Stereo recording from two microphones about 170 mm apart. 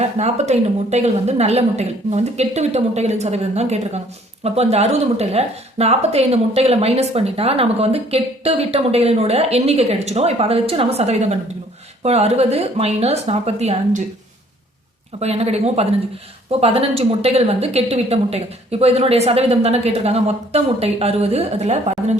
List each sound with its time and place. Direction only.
0.0 s a woman's voice: 40° right (ahead or behind)
15.2 s a woman's voice: 40° right (ahead or behind)